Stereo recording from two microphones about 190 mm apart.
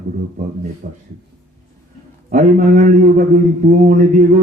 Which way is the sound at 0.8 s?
40° right (ahead or behind).